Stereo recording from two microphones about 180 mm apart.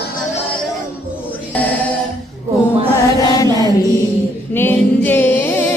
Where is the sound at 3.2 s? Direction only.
20° left (ahead or behind).